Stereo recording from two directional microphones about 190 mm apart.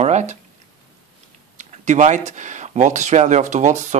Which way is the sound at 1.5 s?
40° right (ahead or behind).